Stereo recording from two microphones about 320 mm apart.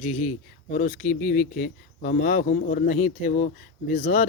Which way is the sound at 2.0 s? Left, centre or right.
Left.